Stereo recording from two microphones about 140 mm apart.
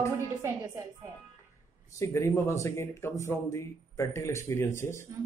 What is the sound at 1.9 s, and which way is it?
Speech, 20° left (ahead or behind).